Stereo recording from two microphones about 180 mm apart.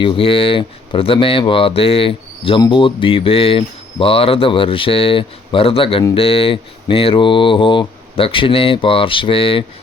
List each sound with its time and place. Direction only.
0.0 s speech: 30° left (ahead or behind)
6.1 s mantra: 30° left (ahead or behind)